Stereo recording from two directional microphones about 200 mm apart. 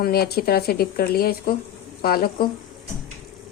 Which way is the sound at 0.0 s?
50° left (ahead or behind).